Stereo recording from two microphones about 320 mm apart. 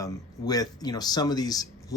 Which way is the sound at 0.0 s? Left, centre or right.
Centre.